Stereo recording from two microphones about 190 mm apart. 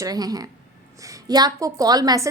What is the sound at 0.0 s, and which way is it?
A woman's voice, 20° right (ahead or behind).